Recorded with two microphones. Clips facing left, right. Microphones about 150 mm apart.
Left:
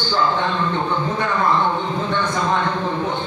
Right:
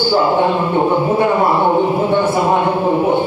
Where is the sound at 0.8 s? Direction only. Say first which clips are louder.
Right 8 dB; 45° right (ahead or behind).